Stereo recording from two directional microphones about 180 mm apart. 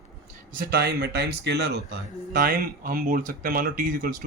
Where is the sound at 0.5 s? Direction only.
55° right (ahead or behind).